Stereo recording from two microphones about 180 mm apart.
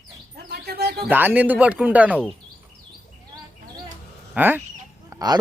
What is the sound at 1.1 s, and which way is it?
Speech, 10° right (ahead or behind).